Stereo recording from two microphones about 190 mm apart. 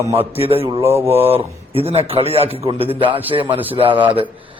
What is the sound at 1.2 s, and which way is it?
A man's voice, 30° right (ahead or behind).